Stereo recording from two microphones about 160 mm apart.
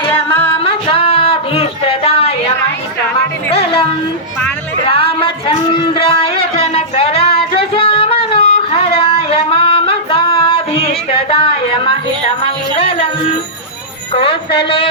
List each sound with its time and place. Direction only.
0.5 s a sound: 35° left (ahead or behind)
3.5 s music: 35° left (ahead or behind)
4.9 s music: 35° left (ahead or behind)
14.1 s speech: 35° left (ahead or behind)